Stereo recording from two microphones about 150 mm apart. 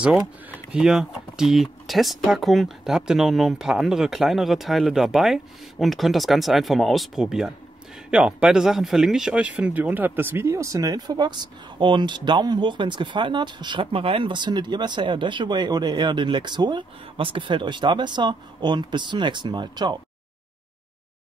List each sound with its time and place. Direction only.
0.0 s speech: 10° right (ahead or behind); by 20.0 s 30° right (ahead or behind)